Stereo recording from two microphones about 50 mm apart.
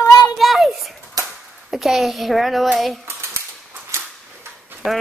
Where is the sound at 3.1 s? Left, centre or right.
Right.